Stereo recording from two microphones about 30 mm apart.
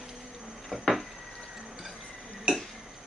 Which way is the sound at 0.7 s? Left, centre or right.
Centre.